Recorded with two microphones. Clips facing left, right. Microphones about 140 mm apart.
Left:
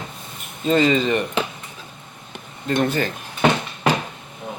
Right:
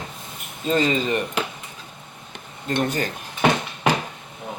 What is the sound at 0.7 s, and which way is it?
Speech, 45° right (ahead or behind).